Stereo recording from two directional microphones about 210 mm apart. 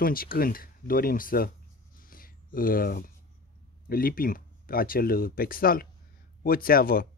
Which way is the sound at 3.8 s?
45° left (ahead or behind).